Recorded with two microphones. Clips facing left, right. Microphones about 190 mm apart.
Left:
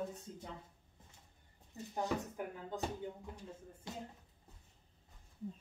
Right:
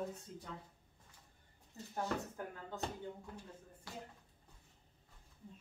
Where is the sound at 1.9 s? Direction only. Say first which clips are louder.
Left 2 dB; 15° left (ahead or behind).